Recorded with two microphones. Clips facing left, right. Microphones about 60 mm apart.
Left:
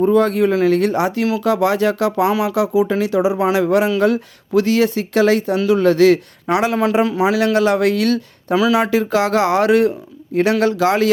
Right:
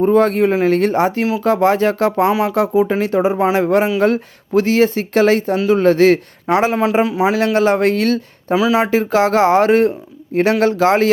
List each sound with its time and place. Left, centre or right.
0.0 s speech: right
8.5 s speech: centre
8.9 s speech: right